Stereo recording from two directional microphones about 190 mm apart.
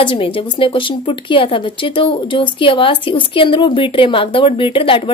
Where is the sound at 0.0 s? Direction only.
25° left (ahead or behind).